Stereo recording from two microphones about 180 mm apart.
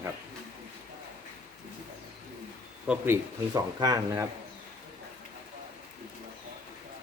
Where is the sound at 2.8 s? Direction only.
10° right (ahead or behind).